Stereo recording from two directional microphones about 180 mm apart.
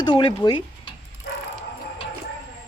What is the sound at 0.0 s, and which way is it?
Speech, 25° left (ahead or behind).